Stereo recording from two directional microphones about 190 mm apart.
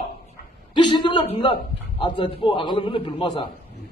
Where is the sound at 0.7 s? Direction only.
25° left (ahead or behind).